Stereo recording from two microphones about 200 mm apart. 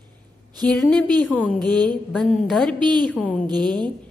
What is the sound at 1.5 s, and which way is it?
Speech, 20° right (ahead or behind).